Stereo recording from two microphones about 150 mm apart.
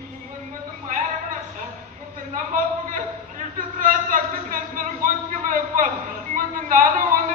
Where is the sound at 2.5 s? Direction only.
60° right (ahead or behind).